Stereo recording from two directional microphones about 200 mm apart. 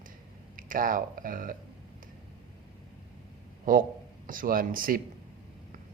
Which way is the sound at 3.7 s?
40° right (ahead or behind).